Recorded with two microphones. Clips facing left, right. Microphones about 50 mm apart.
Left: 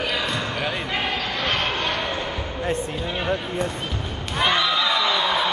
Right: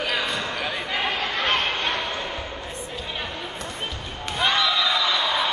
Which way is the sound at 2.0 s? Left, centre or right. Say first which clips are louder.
Left 2 dB; centre.